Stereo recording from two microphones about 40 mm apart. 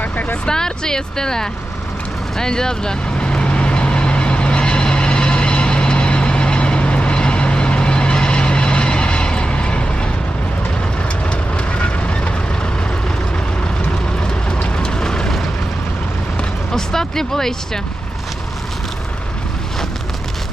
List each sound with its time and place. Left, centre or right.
0.0 s vehicle: left
0.4 s speech: centre
3.2 s vehicle: left
11.3 s train: left
14.6 s vehicle: left
16.7 s speech: centre